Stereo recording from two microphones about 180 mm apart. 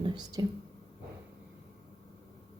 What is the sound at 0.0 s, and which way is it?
Speech, 25° right (ahead or behind).